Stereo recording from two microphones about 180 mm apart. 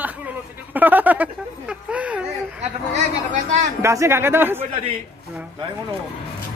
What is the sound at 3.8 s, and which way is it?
Speech, 15° right (ahead or behind).